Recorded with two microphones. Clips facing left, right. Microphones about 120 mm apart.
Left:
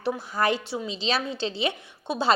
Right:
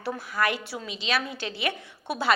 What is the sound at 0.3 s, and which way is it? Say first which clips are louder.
A woman's voice: left 2 dB; 30° left (ahead or behind).